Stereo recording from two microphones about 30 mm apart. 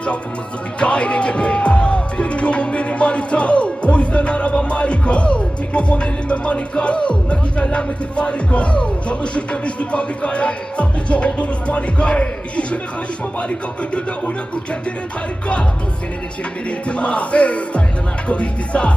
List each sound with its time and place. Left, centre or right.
0.8 s music: left
16.9 s music: left